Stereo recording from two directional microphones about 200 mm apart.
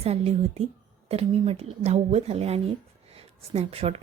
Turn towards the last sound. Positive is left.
turn(degrees=-30)  # may be behind; listen again after turning